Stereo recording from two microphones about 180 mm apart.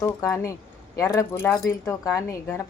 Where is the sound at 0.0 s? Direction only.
15° left (ahead or behind).